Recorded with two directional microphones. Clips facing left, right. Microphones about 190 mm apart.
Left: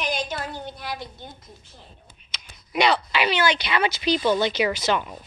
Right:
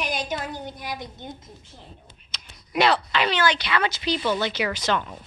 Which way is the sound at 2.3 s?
Centre (ahead or behind).